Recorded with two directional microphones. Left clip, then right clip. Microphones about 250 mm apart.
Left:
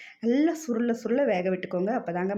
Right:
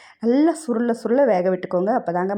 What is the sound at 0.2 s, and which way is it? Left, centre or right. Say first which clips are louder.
Speech: right 7 dB; centre.